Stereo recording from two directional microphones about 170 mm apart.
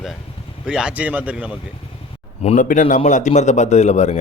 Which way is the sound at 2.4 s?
45° left (ahead or behind).